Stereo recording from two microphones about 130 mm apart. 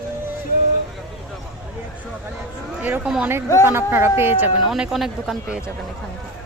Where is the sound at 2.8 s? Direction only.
15° right (ahead or behind).